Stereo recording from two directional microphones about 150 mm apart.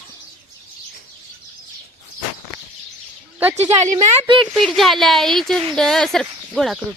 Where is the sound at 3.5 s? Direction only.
45° right (ahead or behind).